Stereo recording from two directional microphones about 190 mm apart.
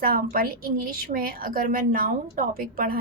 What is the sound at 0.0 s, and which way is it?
A woman's voice, 50° right (ahead or behind).